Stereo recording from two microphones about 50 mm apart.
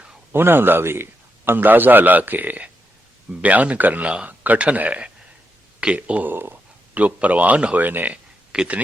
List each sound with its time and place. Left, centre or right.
0.3 s a man's voice: right
1.5 s a man's voice: right
6.2 s a sound: right
7.0 s speech: right
7.8 s a man's voice: right
8.1 s a sound: right